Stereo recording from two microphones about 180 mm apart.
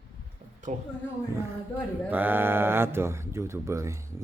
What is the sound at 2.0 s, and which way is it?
Speech, 10° right (ahead or behind).